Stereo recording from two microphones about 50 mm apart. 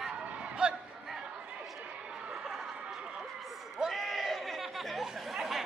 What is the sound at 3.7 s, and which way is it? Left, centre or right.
Chatter, centre.